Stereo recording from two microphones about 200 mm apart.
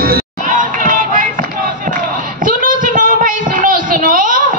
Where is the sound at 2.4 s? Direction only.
40° right (ahead or behind).